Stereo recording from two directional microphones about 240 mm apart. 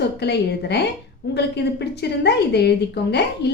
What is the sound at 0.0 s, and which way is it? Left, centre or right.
A woman's voice, left.